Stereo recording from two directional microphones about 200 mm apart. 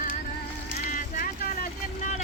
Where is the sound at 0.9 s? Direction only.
45° left (ahead or behind).